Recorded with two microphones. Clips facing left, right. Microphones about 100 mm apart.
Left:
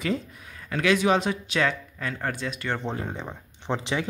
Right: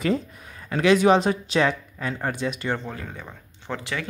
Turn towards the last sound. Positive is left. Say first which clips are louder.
# left 3 dB
turn(degrees=20)  # may be behind; listen again after turning